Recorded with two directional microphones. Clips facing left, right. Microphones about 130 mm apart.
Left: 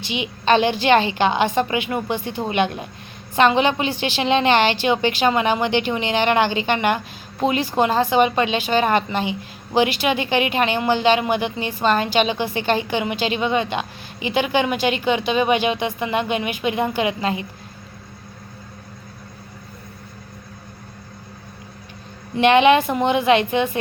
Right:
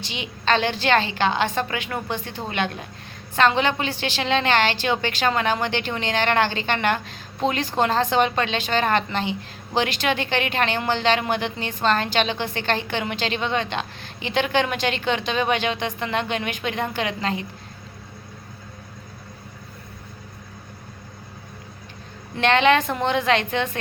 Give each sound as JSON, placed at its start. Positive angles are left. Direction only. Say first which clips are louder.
{"t": 0.0, "sound": "speech", "louder": "left 4 dB", "side_deg": 15}
{"t": 22.4, "sound": "speech", "louder": "left 4 dB", "side_deg": 15}